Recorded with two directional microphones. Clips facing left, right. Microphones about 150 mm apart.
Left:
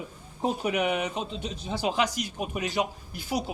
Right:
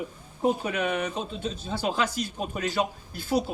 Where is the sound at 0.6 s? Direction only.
15° left (ahead or behind).